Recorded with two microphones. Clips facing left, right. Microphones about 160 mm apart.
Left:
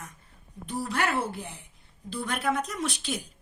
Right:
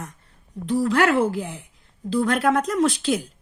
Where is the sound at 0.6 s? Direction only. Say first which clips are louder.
Right 10 dB; 90° right.